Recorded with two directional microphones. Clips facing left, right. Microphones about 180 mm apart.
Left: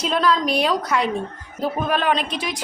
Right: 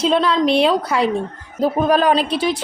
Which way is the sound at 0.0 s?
30° right (ahead or behind).